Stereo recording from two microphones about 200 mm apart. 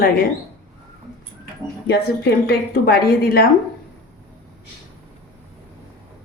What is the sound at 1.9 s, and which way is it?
A woman's voice, 55° left (ahead or behind).